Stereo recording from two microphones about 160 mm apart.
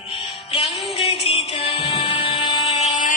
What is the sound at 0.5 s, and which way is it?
Music, 35° left (ahead or behind).